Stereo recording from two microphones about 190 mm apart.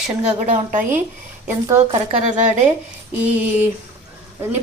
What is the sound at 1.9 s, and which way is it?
Speech, 35° right (ahead or behind).